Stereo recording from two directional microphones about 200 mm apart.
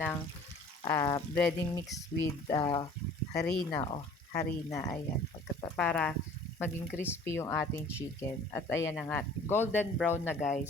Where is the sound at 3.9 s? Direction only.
15° left (ahead or behind).